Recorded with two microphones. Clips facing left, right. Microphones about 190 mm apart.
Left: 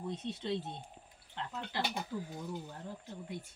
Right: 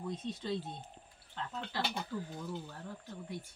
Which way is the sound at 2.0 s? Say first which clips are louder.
Even; 10° left (ahead or behind).